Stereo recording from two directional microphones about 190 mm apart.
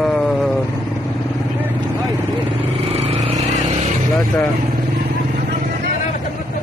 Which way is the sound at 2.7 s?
30° right (ahead or behind).